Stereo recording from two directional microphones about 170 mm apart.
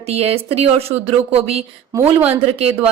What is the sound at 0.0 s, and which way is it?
Speech, 35° right (ahead or behind).